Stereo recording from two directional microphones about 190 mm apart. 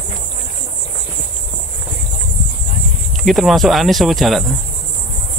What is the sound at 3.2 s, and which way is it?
Speech, centre (ahead or behind).